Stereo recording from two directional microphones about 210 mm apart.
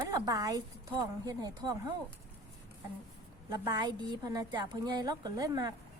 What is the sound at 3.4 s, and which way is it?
A woman's voice, 20° right (ahead or behind).